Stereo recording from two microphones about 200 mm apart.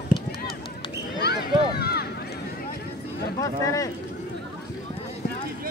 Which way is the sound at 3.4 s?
15° left (ahead or behind).